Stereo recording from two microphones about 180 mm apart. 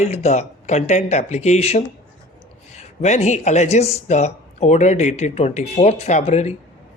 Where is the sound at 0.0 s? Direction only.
40° left (ahead or behind).